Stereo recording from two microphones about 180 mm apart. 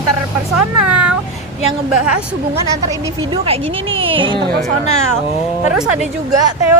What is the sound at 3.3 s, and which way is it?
Speech, 30° right (ahead or behind).